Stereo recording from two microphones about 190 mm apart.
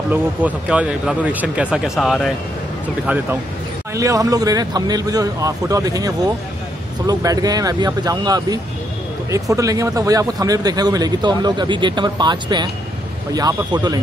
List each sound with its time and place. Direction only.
0.1 s speech: 10° right (ahead or behind)
3.9 s speech: 15° right (ahead or behind)